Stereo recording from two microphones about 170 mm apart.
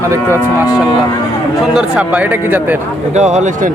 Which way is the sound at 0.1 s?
15° right (ahead or behind).